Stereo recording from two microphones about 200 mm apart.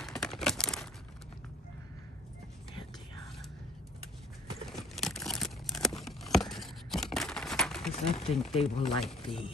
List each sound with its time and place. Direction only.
0.0 s crumpling: centre (ahead or behind)
4.6 s a sound: centre (ahead or behind)
7.9 s speech: 30° left (ahead or behind)